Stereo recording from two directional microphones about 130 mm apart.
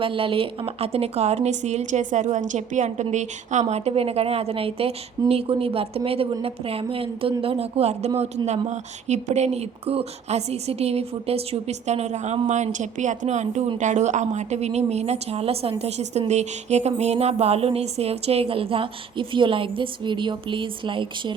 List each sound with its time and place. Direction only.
0.0 s speech: 45° right (ahead or behind)